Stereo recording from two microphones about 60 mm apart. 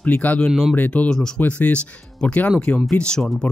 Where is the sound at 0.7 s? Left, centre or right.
Left.